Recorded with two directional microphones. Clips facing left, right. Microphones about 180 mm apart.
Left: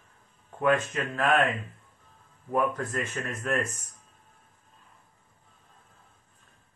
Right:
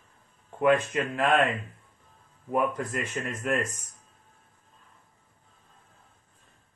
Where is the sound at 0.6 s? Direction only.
15° right (ahead or behind).